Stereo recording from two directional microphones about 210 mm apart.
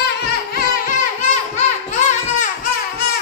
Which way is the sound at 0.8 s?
35° left (ahead or behind).